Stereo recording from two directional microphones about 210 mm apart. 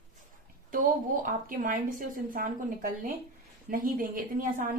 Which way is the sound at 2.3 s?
40° right (ahead or behind).